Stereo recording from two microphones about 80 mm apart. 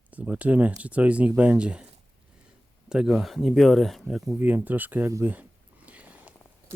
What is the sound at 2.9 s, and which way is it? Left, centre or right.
Speech, centre.